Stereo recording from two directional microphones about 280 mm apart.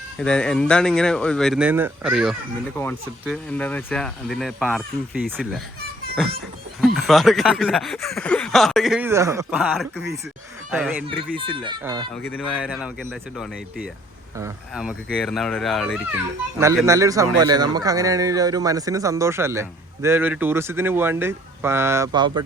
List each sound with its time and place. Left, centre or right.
0.2 s speech: centre
6.8 s speech: centre
9.5 s speech: centre
11.3 s a man's voice: centre
12.1 s speech: centre
16.6 s a man's voice: centre